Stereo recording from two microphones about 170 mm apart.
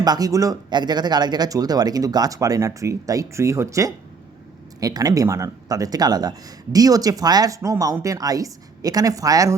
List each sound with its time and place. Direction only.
0.0 s speech: 20° right (ahead or behind)